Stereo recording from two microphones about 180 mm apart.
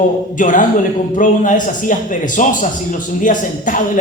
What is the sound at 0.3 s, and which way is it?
A man's voice, 45° left (ahead or behind).